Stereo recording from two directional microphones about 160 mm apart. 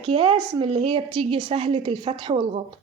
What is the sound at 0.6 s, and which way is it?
Speech, 30° right (ahead or behind).